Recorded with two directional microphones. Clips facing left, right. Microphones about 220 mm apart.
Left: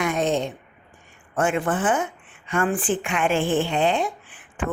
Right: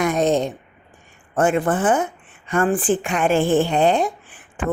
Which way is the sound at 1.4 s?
40° right (ahead or behind).